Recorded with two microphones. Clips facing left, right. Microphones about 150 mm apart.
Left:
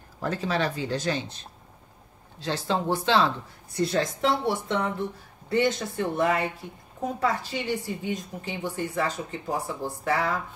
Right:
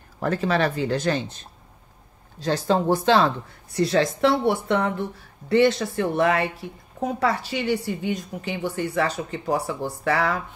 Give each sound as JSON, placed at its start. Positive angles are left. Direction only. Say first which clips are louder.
{"t": 0.2, "sound": "speech", "louder": "right 5 dB", "side_deg": -60}
{"t": 2.4, "sound": "speech", "louder": "right 6 dB", "side_deg": -40}
{"t": 3.7, "sound": "a woman's voice", "louder": "right 5 dB", "side_deg": -80}
{"t": 5.5, "sound": "a woman's voice", "louder": "right 6 dB", "side_deg": -80}